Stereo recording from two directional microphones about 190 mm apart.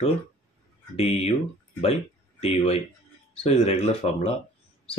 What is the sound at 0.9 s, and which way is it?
Speech, 35° left (ahead or behind).